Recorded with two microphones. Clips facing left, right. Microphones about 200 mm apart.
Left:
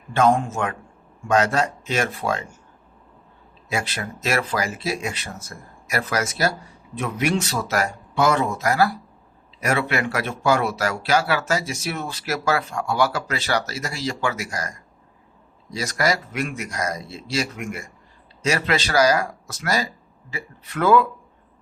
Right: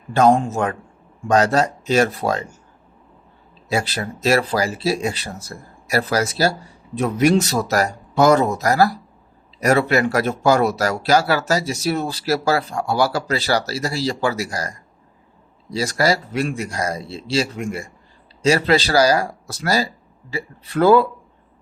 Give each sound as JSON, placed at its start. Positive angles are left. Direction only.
{"t": 0.1, "sound": "speech", "side_deg": -35}
{"t": 3.7, "sound": "speech", "side_deg": -35}